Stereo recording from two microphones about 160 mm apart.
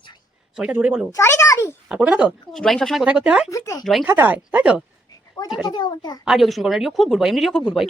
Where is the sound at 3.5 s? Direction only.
20° left (ahead or behind).